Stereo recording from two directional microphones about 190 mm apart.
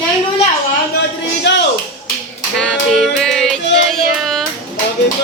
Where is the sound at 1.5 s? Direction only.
65° left (ahead or behind).